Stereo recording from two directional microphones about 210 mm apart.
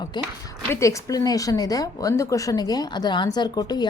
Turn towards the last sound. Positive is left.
turn(degrees=20)  # may be behind; listen again after turning